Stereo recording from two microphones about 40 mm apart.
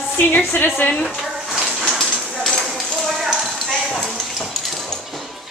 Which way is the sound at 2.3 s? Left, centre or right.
Centre.